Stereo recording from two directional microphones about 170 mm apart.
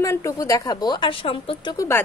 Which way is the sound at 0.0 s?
20° left (ahead or behind).